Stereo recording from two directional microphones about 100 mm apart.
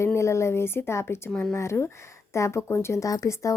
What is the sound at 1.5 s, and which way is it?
A woman's voice, 25° left (ahead or behind).